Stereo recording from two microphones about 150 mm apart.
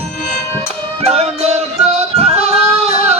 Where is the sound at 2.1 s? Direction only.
45° right (ahead or behind).